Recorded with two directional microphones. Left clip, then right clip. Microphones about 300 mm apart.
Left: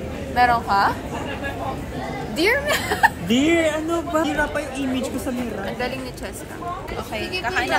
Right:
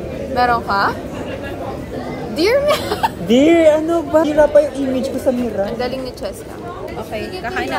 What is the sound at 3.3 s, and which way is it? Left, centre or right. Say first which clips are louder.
A woman's voice: right 8 dB; right.